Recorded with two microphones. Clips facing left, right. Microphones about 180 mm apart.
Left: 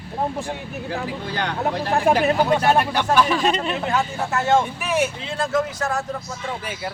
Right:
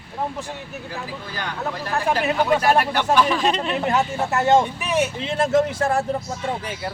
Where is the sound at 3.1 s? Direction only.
Centre (ahead or behind).